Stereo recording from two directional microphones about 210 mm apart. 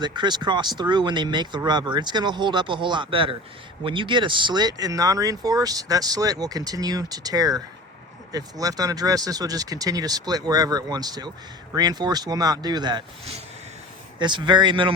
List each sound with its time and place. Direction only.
0.0 s speech: 20° right (ahead or behind)